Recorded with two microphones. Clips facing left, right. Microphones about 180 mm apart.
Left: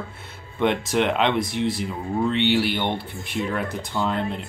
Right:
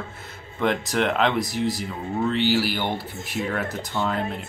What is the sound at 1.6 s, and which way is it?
Speech, 40° right (ahead or behind).